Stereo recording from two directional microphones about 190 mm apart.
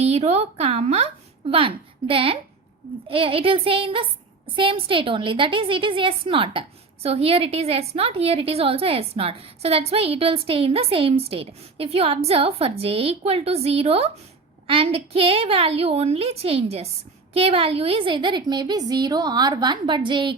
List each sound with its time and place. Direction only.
0.1 s a woman's voice: 35° right (ahead or behind)